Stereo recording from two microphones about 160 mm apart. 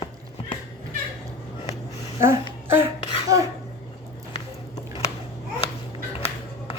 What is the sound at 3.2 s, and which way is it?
Dishes, 20° right (ahead or behind).